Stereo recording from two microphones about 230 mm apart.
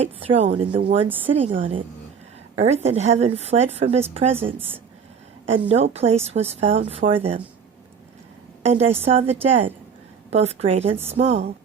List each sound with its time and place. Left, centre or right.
0.0 s a woman's voice: right
5.7 s a woman's voice: right
8.6 s a woman's voice: right